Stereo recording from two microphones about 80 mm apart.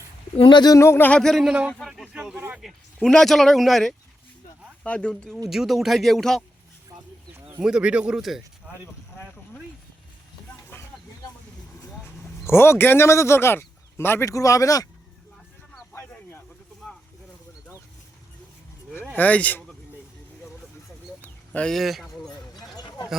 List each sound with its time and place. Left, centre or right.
0.4 s speech: left
0.7 s speech: left
1.2 s speech: centre
1.5 s speech: centre
2.6 s speech: centre
5.5 s speech: centre
7.6 s speech: centre
12.5 s speech: left
14.3 s speech: left
19.1 s speech: centre
21.2 s a sound: centre
21.7 s speech: centre
22.3 s a sound: left